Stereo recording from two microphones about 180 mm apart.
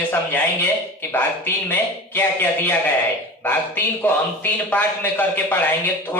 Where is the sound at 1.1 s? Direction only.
10° left (ahead or behind).